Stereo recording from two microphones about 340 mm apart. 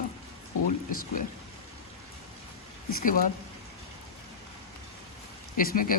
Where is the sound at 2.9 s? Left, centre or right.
Left.